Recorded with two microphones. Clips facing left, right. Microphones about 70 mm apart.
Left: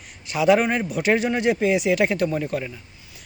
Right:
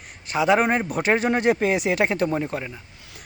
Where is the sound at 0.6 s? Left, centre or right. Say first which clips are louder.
Even; right.